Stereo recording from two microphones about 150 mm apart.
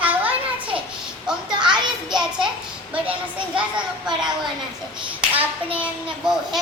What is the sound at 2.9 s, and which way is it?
A child's voice, 10° right (ahead or behind).